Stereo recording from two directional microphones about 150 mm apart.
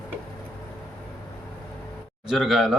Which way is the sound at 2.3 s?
Centre (ahead or behind).